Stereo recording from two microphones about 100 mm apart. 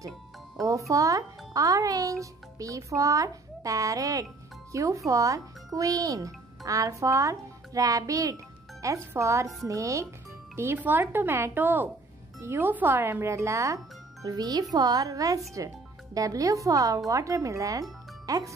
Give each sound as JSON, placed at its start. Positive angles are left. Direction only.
{"t": 0.7, "sound": "a child's voice", "side_deg": -35}
{"t": 14.2, "sound": "speech", "side_deg": -40}
{"t": 18.2, "sound": "music", "side_deg": -35}